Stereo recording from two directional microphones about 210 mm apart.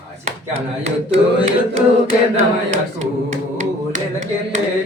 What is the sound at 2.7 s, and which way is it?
Singing, 35° right (ahead or behind).